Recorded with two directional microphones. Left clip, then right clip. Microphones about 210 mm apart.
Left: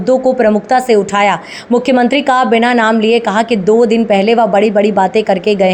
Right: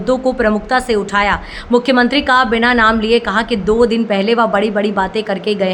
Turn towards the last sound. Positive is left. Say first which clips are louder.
# left 6 dB
turn(degrees=15)  # may be behind; listen again after turning